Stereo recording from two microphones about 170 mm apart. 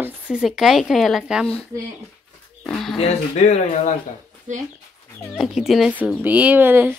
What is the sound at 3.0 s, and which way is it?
Speech, 40° left (ahead or behind).